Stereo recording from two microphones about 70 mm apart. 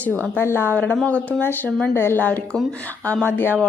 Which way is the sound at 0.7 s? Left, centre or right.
Left.